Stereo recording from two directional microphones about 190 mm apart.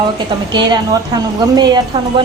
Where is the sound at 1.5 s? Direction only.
20° right (ahead or behind).